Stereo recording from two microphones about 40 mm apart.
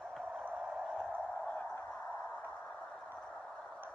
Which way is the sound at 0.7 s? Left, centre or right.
Centre.